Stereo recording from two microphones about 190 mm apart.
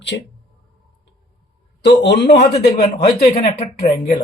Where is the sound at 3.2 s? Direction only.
35° left (ahead or behind).